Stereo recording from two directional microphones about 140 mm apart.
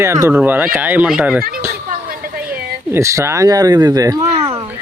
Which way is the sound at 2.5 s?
20° right (ahead or behind).